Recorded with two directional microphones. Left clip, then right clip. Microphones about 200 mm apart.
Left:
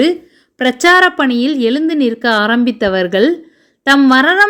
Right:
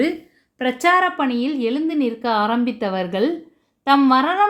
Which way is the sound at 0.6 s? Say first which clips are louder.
Left 7 dB; 40° left (ahead or behind).